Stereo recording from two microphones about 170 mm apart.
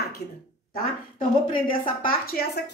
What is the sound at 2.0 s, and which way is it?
Speech, 60° left (ahead or behind).